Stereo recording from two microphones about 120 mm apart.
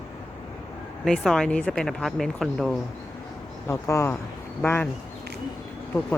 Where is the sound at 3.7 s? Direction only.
25° left (ahead or behind).